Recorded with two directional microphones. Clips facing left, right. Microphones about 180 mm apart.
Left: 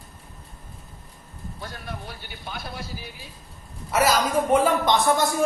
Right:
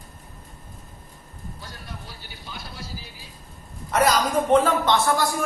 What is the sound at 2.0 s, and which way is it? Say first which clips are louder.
Speech: left 4 dB; 55° left (ahead or behind).